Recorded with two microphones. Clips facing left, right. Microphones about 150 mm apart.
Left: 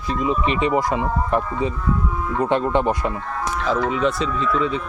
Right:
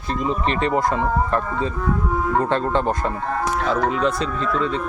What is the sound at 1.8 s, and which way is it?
Speech, 60° right (ahead or behind).